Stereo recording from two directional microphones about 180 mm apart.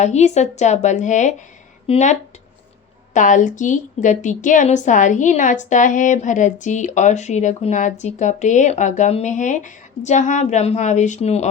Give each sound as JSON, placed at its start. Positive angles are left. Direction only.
{"t": 0.0, "sound": "a woman's voice", "side_deg": 40}